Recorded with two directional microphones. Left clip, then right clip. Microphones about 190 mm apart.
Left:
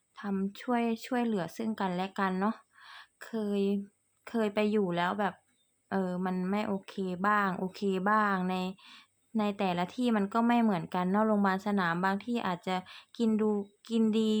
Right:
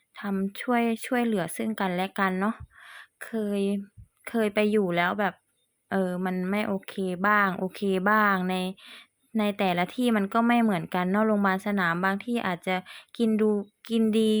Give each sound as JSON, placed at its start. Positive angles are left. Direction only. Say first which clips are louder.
{"t": 0.2, "sound": "speech", "louder": "right 5 dB", "side_deg": -20}